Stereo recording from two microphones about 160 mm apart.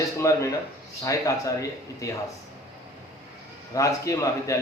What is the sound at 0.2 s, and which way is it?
A man's voice, 20° left (ahead or behind).